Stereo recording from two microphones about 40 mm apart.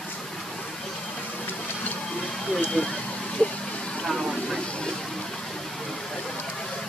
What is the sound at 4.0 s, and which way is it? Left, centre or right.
Vehicle, centre.